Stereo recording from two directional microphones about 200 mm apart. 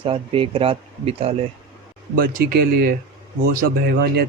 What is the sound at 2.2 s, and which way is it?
Speech, 50° right (ahead or behind).